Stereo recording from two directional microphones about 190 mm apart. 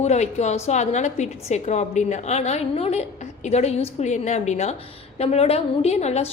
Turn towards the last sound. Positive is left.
turn(degrees=35)  # may be behind; listen again after turning